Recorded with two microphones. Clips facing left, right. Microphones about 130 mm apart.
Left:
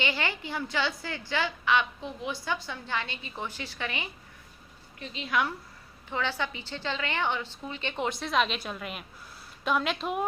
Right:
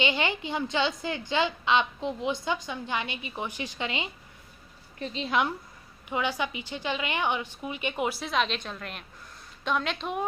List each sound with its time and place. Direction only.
0.0 s a woman's voice: 20° right (ahead or behind)
4.9 s a woman's voice: 35° right (ahead or behind); by 10.2 s 5° left (ahead or behind)